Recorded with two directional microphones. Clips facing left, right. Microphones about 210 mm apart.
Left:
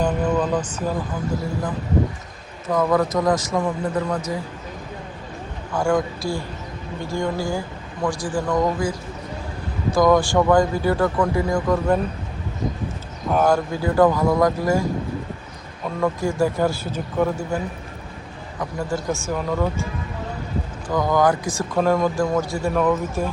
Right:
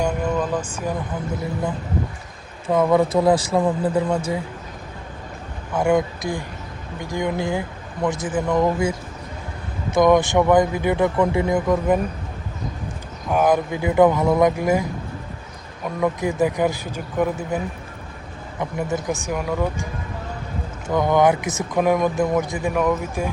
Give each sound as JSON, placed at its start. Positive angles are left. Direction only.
{"t": 0.0, "sound": "a sound", "side_deg": -10}
{"t": 2.6, "sound": "speech", "side_deg": -25}
{"t": 5.7, "sound": "speech", "side_deg": -20}
{"t": 13.3, "sound": "speech", "side_deg": -15}
{"t": 16.0, "sound": "speech", "side_deg": -15}
{"t": 18.6, "sound": "speech", "side_deg": -20}
{"t": 20.8, "sound": "speech", "side_deg": -25}